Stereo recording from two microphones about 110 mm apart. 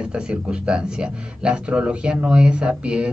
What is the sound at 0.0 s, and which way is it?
A man's voice, 10° right (ahead or behind).